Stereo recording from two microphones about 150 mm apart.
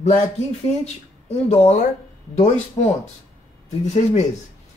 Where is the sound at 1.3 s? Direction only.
50° left (ahead or behind).